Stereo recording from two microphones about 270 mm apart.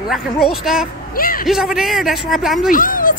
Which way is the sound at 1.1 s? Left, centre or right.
Left.